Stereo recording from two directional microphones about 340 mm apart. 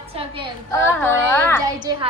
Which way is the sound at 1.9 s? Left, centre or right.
Centre.